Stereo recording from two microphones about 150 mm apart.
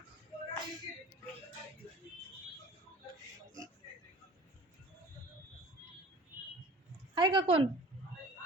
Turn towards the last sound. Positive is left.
turn(degrees=-35)  # may be behind; listen again after turning